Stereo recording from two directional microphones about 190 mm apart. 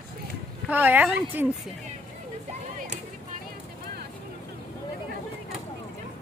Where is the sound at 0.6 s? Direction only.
10° right (ahead or behind).